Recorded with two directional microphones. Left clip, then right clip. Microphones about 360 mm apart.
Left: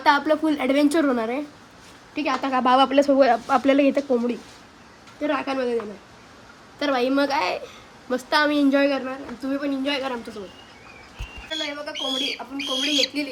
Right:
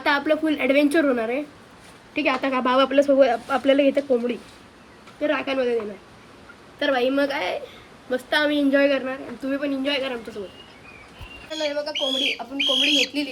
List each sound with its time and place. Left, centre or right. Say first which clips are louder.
0.1 s a woman's voice: left 1 dB; centre
11.5 s speech: right 3 dB; centre